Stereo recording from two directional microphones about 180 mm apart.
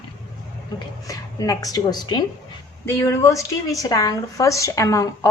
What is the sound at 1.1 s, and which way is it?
A woman's voice, 20° left (ahead or behind).